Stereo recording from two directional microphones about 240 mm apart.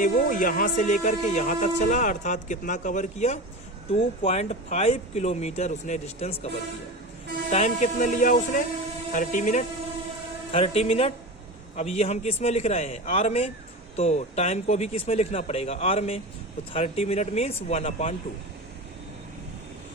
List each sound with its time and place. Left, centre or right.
0.0 s speech: left
7.5 s speech: left